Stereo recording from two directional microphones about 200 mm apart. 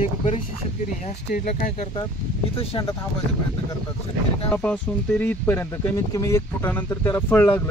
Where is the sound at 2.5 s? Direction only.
30° left (ahead or behind).